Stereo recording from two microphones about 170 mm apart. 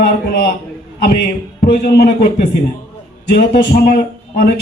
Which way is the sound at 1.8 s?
70° left (ahead or behind).